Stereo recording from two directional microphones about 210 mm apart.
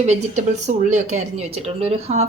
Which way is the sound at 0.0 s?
35° right (ahead or behind).